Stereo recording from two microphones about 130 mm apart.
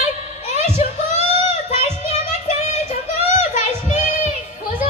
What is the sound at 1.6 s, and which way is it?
Child singing, 60° left (ahead or behind).